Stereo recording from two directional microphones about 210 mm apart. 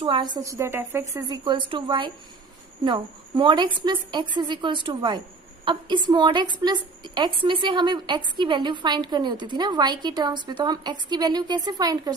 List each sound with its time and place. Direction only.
0.0 s a woman's voice: 20° right (ahead or behind)